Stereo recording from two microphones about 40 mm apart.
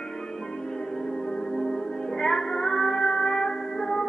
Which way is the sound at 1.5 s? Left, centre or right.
Centre.